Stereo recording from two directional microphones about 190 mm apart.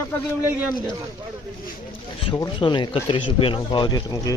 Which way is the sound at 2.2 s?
25° left (ahead or behind).